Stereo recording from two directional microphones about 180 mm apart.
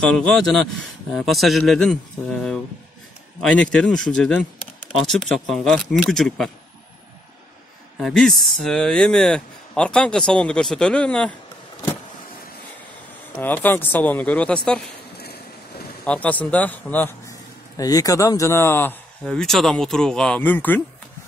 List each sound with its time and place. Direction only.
0.0 s speech: 5° left (ahead or behind)
8.0 s speech: centre (ahead or behind)
13.4 s a man's voice: 10° left (ahead or behind)
15.1 s a sound: 60° left (ahead or behind)
16.0 s a man's voice: 5° left (ahead or behind)